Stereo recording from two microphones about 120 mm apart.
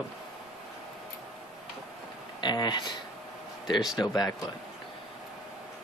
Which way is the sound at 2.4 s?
35° left (ahead or behind).